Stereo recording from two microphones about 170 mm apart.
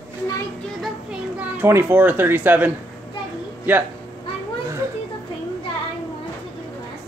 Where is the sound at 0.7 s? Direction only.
5° right (ahead or behind).